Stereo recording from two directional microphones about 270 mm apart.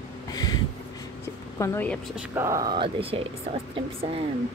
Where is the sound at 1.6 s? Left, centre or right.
Centre.